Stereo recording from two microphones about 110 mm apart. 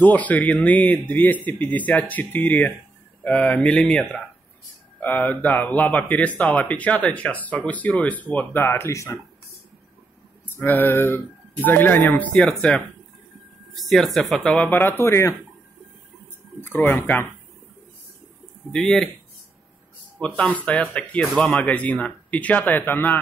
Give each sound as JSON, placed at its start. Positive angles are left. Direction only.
{"t": 0.0, "sound": "speech", "side_deg": 15}
{"t": 5.0, "sound": "speech", "side_deg": 15}
{"t": 10.5, "sound": "a sound", "side_deg": 20}
{"t": 11.6, "sound": "speech", "side_deg": 20}
{"t": 13.7, "sound": "speech", "side_deg": 0}
{"t": 14.7, "sound": "a sound", "side_deg": 20}
{"t": 16.6, "sound": "speech", "side_deg": 20}
{"t": 18.7, "sound": "speech", "side_deg": 5}
{"t": 20.2, "sound": "speech", "side_deg": 10}